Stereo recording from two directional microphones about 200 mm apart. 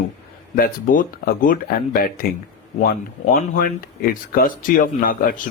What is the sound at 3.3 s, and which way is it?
Speech, 45° left (ahead or behind).